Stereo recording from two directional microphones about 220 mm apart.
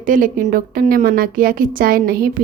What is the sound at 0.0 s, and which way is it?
A woman's voice, 40° right (ahead or behind).